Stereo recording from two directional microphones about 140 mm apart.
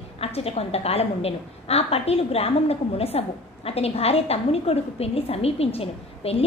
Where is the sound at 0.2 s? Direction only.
45° left (ahead or behind).